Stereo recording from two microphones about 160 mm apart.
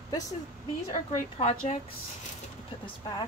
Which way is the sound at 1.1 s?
45° left (ahead or behind).